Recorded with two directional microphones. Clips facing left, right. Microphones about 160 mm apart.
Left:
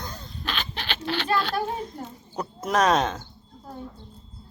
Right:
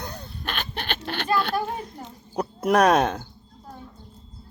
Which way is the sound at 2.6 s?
60° right (ahead or behind).